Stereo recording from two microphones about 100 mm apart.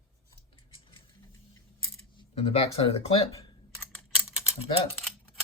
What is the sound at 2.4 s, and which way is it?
Speech, 85° left.